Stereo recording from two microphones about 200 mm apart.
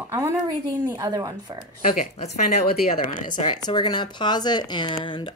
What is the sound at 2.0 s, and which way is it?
Speech, 45° left (ahead or behind).